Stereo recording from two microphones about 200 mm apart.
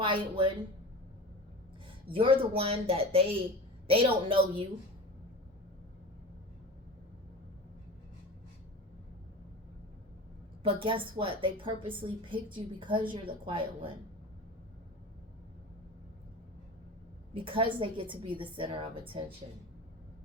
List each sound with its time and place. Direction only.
0.0 s a woman's voice: 25° right (ahead or behind)
2.1 s a woman's voice: 25° right (ahead or behind)
10.6 s a woman's voice: 25° right (ahead or behind)
17.3 s a woman's voice: 25° right (ahead or behind)